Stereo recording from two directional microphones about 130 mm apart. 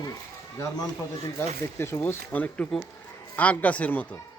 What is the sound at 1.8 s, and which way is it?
Speech, 20° left (ahead or behind).